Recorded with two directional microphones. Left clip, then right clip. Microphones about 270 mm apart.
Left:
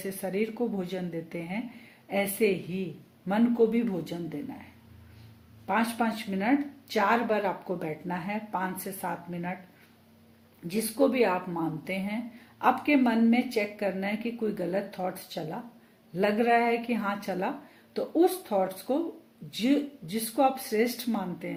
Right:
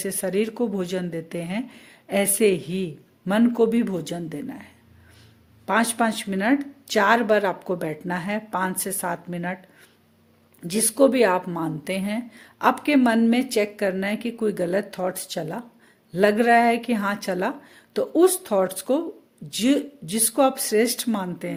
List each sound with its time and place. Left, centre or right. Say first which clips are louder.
0.0 s a woman's voice: right 7 dB; right
5.6 s a woman's voice: right 6 dB; right
10.7 s a woman's voice: right 7 dB; right